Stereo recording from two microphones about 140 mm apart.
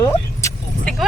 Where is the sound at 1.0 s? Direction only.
Centre (ahead or behind).